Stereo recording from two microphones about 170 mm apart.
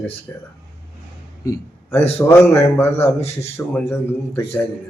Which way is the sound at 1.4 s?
15° left (ahead or behind).